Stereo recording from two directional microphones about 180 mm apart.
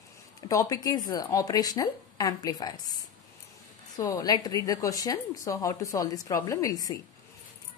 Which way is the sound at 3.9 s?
20° left (ahead or behind).